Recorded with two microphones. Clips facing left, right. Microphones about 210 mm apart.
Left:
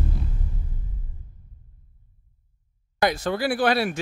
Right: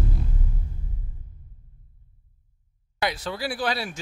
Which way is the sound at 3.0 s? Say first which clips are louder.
Left 5 dB; 45° left (ahead or behind).